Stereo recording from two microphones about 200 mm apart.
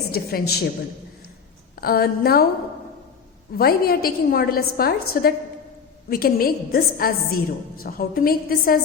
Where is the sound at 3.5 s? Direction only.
50° left (ahead or behind).